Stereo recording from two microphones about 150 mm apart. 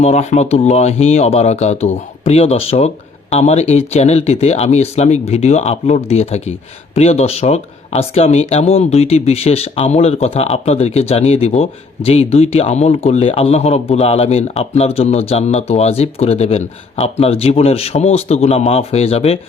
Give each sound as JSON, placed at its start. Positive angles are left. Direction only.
{"t": 0.0, "sound": "speech", "side_deg": 45}